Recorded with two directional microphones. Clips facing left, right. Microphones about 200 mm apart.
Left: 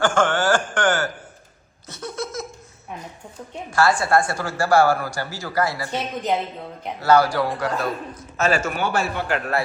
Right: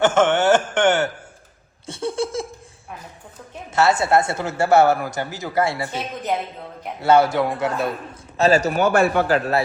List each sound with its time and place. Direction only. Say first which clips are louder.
0.0 s chuckle: right 3 dB; 20° right (ahead or behind)
1.9 s laughter: right 6 dB; 30° right (ahead or behind)
3.7 s speech: right 1 dB; 25° right (ahead or behind)
7.0 s speech: right 1 dB; 25° right (ahead or behind)
8.4 s a man's voice: right 5 dB; 35° right (ahead or behind)
9.2 s a man's voice: right 5 dB; 30° right (ahead or behind)